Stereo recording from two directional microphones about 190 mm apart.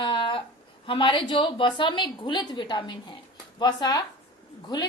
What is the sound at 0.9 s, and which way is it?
A woman's voice, 25° left (ahead or behind).